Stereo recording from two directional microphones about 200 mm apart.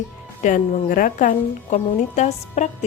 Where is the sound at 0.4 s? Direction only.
40° left (ahead or behind).